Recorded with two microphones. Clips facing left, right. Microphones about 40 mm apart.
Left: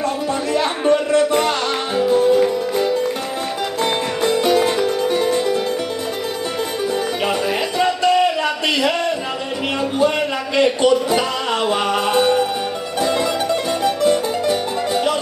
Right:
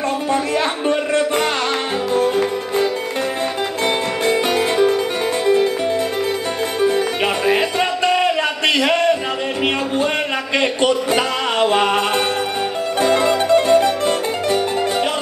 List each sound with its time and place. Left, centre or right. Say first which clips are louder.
0.3 s speech: right 2 dB; right
2.0 s music: left 4 dB; right
4.3 s music: left 2 dB; centre
7.4 s a sound: right 1 dB; right
9.9 s a man's voice: left 1 dB; right
11.6 s music: right 4 dB; right